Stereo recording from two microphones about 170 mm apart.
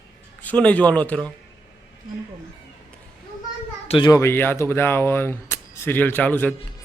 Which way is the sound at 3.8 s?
35° left (ahead or behind).